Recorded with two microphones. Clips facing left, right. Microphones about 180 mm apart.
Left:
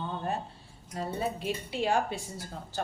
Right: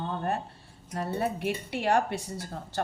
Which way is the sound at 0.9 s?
65° right (ahead or behind).